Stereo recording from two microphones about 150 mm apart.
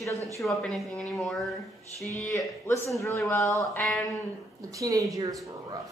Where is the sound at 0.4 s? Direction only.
Centre (ahead or behind).